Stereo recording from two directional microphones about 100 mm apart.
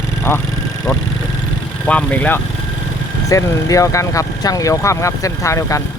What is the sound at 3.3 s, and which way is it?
Speech, 35° left (ahead or behind).